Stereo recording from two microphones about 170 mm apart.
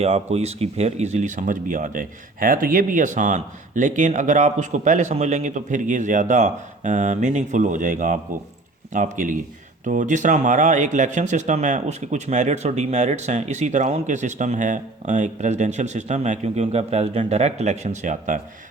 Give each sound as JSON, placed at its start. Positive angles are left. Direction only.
{"t": 0.0, "sound": "speech", "side_deg": -40}